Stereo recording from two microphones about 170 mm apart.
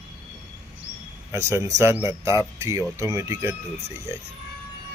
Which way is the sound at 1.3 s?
15° right (ahead or behind).